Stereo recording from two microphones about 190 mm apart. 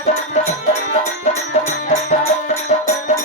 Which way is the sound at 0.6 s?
40° left (ahead or behind).